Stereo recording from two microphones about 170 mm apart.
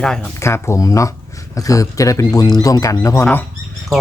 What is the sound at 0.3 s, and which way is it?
Speech, 15° left (ahead or behind).